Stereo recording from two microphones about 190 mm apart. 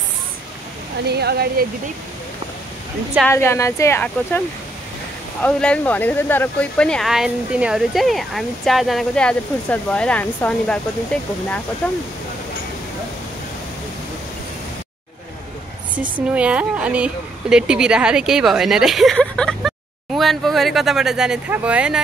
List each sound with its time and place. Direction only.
1.0 s speech: 60° right (ahead or behind)
3.3 s speech: 15° left (ahead or behind)
5.4 s speech: 5° left (ahead or behind)
16.3 s speech: 5° right (ahead or behind)